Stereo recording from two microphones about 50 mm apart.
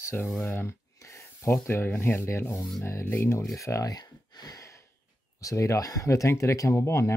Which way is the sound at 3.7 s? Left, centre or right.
Left.